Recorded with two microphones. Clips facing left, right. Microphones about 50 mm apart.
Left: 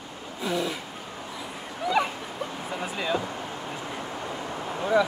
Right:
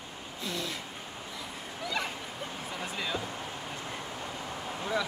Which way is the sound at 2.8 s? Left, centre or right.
Centre.